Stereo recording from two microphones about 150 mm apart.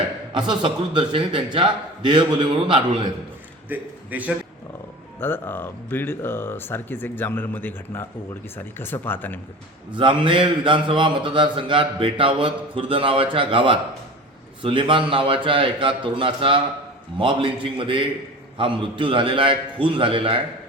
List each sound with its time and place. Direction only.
0.3 s a man's voice: 30° right (ahead or behind)
3.7 s a man's voice: 10° right (ahead or behind)
5.2 s speech: 15° left (ahead or behind)
9.9 s a man's voice: 30° right (ahead or behind)